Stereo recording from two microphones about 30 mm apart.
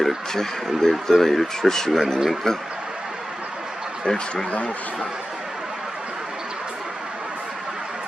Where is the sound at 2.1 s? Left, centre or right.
Centre.